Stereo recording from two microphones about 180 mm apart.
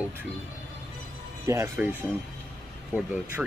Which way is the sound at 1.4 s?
15° right (ahead or behind).